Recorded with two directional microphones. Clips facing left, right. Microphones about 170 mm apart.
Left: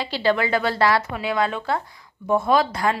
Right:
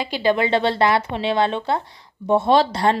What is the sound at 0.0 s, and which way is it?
A woman's voice, 20° right (ahead or behind).